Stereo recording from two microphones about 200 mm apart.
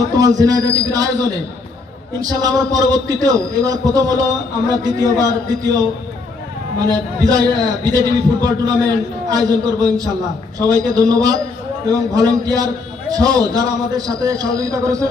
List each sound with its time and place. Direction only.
0.0 s a man's voice: 20° right (ahead or behind)
7.2 s a man's voice: 20° right (ahead or behind)